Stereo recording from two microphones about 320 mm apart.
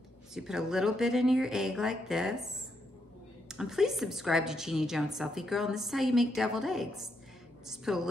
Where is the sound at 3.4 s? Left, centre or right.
Centre.